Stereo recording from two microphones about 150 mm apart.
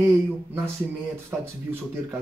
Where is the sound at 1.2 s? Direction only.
15° right (ahead or behind).